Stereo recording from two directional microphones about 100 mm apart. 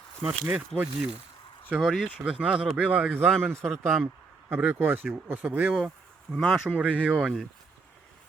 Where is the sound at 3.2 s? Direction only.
5° left (ahead or behind).